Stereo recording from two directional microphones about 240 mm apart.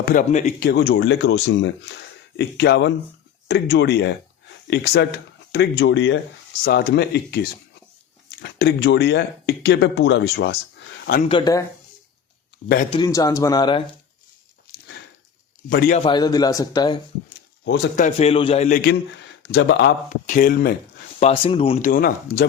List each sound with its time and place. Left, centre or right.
0.0 s speech: left
0.7 s speech: left
11.3 s speech: centre
12.9 s speech: centre
14.7 s a sound: left
15.7 s speech: left
16.0 s speech: centre
17.9 s speech: left
18.9 s speech: left
20.1 s speech: left
21.2 s speech: left